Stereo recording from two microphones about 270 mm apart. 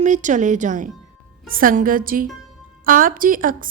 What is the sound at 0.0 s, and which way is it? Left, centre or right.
A woman's voice, right.